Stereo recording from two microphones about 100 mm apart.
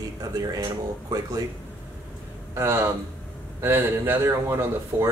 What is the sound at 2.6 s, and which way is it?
Speech, 25° right (ahead or behind).